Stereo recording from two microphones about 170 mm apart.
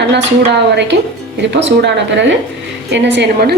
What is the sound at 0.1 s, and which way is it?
A woman's voice, 85° right.